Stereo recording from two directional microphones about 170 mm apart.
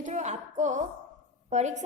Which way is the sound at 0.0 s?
45° right (ahead or behind).